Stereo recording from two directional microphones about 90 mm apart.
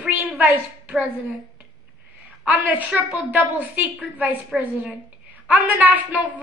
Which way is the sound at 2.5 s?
20° right (ahead or behind).